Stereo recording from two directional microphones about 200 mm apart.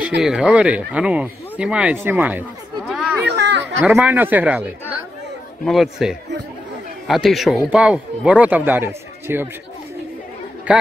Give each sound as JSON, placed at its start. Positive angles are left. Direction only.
{"t": 0.2, "sound": "speech", "side_deg": -5}
{"t": 2.9, "sound": "chatter", "side_deg": -5}
{"t": 3.3, "sound": "chatter", "side_deg": -60}
{"t": 3.7, "sound": "speech", "side_deg": -10}
{"t": 10.7, "sound": "speech", "side_deg": -5}